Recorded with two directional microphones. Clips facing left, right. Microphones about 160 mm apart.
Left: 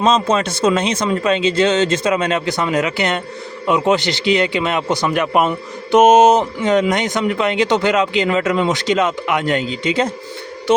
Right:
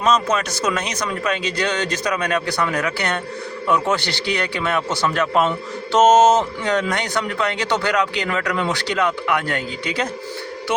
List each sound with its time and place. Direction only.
0.0 s speech: 25° left (ahead or behind)